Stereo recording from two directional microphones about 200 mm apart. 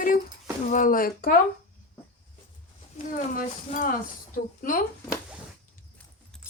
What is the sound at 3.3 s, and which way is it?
A woman's voice, 40° left (ahead or behind).